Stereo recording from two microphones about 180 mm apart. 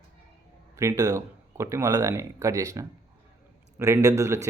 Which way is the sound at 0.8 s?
15° right (ahead or behind).